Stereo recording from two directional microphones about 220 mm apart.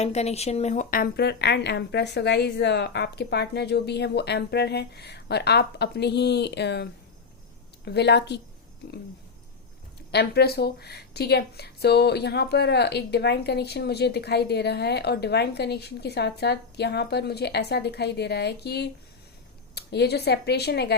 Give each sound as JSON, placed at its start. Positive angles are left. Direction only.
{"t": 0.0, "sound": "a woman's voice", "side_deg": 30}
{"t": 7.9, "sound": "a woman's voice", "side_deg": 50}
{"t": 10.1, "sound": "a woman's voice", "side_deg": 45}